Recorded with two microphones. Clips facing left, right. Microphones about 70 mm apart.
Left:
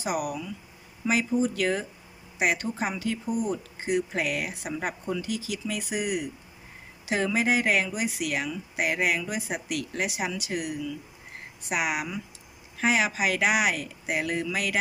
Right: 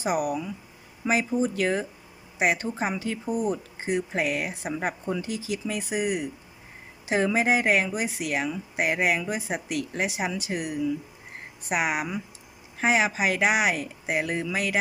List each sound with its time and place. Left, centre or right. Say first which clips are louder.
0.0 s speech: right 3 dB; right
4.4 s speech: right 2 dB; right